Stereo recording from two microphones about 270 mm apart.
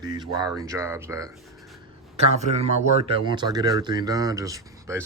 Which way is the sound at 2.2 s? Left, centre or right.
Right.